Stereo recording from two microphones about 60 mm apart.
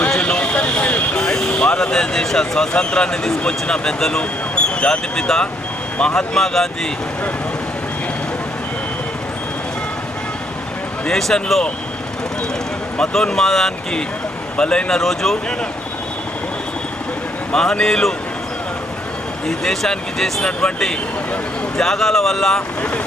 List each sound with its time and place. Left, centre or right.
0.2 s vehicle: centre
1.1 s speech: centre
11.0 s speech: centre
13.0 s speech: centre
17.5 s speech: centre
19.5 s speech: centre